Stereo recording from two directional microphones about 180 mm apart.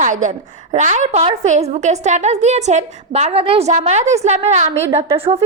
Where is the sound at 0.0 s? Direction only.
45° right (ahead or behind).